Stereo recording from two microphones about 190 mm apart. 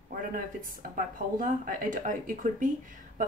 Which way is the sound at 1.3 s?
45° right (ahead or behind).